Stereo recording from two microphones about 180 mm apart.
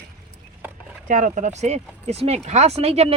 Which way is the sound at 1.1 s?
45° right (ahead or behind).